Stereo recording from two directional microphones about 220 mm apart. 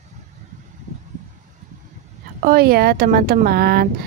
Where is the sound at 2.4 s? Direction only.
40° right (ahead or behind).